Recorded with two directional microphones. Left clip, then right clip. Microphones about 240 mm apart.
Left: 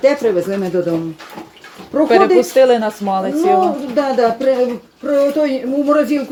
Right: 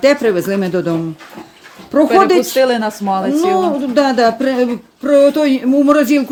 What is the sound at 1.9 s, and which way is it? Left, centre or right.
Speech, right.